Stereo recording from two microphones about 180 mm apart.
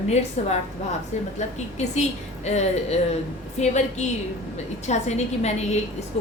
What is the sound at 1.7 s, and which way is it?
A woman's voice, 40° left (ahead or behind).